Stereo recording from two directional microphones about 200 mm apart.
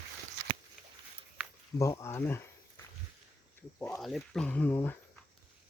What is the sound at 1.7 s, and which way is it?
Speech, 15° left (ahead or behind).